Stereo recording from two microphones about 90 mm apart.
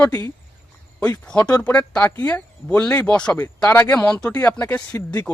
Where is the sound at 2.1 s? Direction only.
25° left (ahead or behind).